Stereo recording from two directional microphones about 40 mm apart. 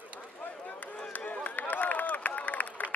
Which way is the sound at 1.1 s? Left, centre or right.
Left.